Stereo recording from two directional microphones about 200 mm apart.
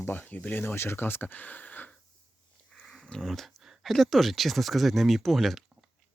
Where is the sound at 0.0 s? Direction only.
10° left (ahead or behind).